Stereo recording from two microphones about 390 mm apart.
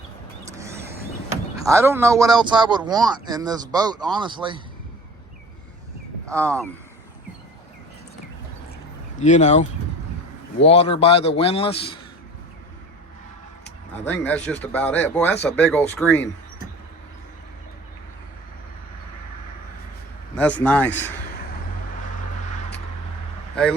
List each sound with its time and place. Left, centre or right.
1.5 s speech: centre
6.2 s speech: centre
9.1 s a man's voice: centre
13.9 s speech: centre
20.3 s speech: centre